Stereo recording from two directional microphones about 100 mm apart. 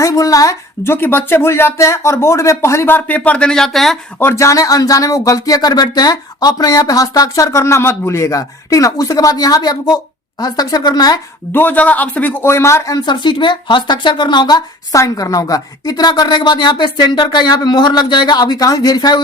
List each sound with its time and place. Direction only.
0.0 s a sound: 35° left (ahead or behind)
0.9 s speech: 20° left (ahead or behind); by 3.9 s centre (ahead or behind)
4.2 s speech: 25° left (ahead or behind); by 11.2 s 40° left (ahead or behind)
11.5 s speech: 15° left (ahead or behind); by 13.1 s 35° left (ahead or behind)
13.2 s a woman's voice: 50° left (ahead or behind)
14.9 s a woman's voice: 35° left (ahead or behind)